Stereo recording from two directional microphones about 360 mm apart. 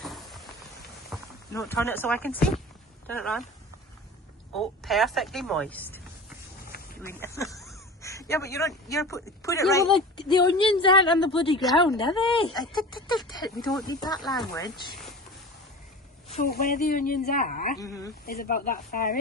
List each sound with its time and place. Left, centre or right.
0.0 s a sound: centre
1.5 s speech: centre
4.5 s speech: centre
7.0 s speech: centre
14.2 s speech: centre
16.3 s speech: left
17.7 s speech: centre
18.3 s speech: left